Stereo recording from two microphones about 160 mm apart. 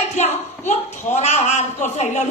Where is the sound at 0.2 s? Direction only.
45° left (ahead or behind).